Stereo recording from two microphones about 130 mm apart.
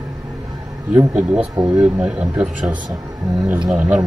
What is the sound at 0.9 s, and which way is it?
Speech, 15° right (ahead or behind).